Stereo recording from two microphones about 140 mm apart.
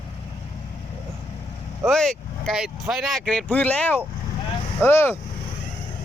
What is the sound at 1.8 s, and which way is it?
Speech, 5° left (ahead or behind).